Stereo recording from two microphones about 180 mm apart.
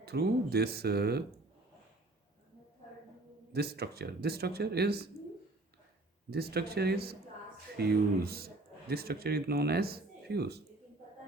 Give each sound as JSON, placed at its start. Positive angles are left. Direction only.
{"t": 0.0, "sound": "speech", "side_deg": -60}
{"t": 3.5, "sound": "speech", "side_deg": -60}
{"t": 6.3, "sound": "speech", "side_deg": -60}